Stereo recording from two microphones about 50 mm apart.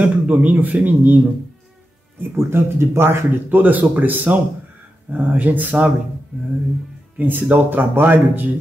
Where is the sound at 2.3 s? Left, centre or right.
Right.